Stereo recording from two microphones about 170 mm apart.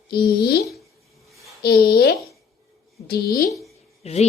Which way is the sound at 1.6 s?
70° left (ahead or behind).